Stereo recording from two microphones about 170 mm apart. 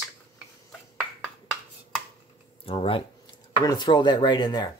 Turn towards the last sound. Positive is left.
turn(degrees=25)  # may be behind; listen again after turning